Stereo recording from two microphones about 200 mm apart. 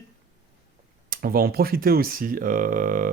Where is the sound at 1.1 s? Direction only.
45° right (ahead or behind).